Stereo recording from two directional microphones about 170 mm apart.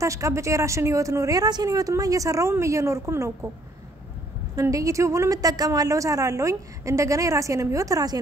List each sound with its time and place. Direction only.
0.0 s speech: 20° right (ahead or behind)
4.6 s a woman's voice: 20° right (ahead or behind)